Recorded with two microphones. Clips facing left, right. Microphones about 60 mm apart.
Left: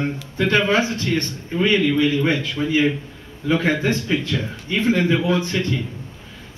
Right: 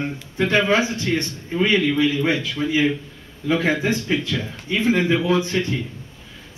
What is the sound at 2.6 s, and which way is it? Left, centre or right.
Speech, centre.